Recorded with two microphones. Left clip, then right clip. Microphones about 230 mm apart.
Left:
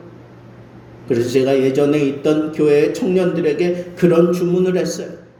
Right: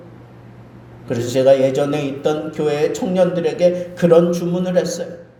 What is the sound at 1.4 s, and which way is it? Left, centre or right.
A man's voice, right.